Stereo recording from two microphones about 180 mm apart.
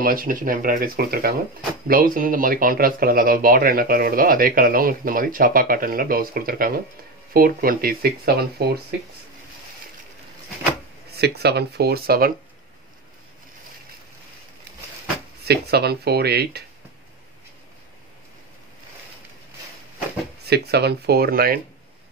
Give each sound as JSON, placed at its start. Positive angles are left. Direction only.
{"t": 0.0, "sound": "speech", "side_deg": -50}
{"t": 11.1, "sound": "speech", "side_deg": -65}
{"t": 15.4, "sound": "speech", "side_deg": -60}
{"t": 20.4, "sound": "speech", "side_deg": -65}